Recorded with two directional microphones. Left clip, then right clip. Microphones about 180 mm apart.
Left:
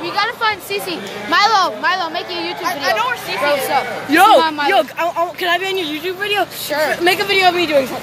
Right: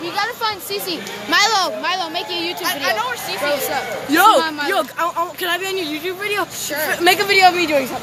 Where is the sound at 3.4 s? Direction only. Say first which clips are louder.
Left 5 dB; 10° right (ahead or behind).